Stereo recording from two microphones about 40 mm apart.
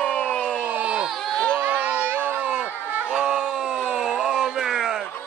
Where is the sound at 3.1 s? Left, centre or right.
Right.